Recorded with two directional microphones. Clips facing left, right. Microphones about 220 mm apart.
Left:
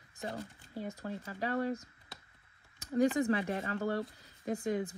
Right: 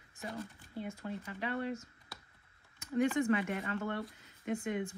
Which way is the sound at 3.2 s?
35° left (ahead or behind).